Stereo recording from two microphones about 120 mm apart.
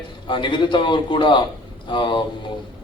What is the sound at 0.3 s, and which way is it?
A man's voice, 40° left (ahead or behind).